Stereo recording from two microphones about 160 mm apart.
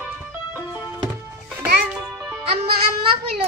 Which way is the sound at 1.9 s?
Centre (ahead or behind).